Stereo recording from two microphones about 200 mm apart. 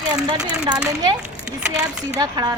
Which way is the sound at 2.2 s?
20° right (ahead or behind).